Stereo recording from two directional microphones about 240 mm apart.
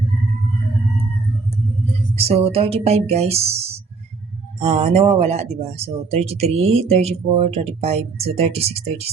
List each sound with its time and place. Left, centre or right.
2.1 s speech: right